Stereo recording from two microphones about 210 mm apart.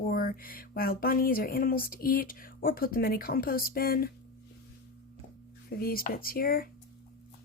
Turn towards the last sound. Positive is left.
turn(degrees=45)  # may be behind; listen again after turning